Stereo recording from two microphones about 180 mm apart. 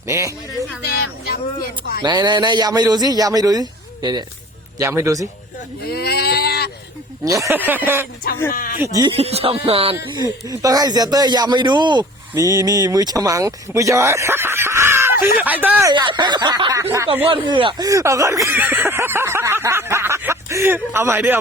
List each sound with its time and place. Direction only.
0.1 s speech: 15° right (ahead or behind)
0.9 s speech: 60° left (ahead or behind)
2.0 s a man's voice: 25° right (ahead or behind)
5.8 s a sound: 60° left (ahead or behind)
7.3 s speech: 15° right (ahead or behind)
8.5 s speech: 50° left (ahead or behind)
8.8 s a man's voice: 20° right (ahead or behind)
9.1 s speech: 35° right (ahead or behind)
10.2 s a man's voice: 20° right (ahead or behind)
15.9 s a man's voice: 25° right (ahead or behind)